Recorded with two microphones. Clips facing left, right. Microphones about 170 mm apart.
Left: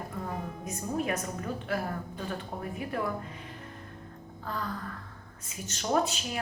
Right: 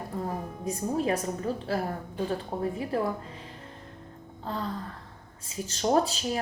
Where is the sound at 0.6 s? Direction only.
30° right (ahead or behind).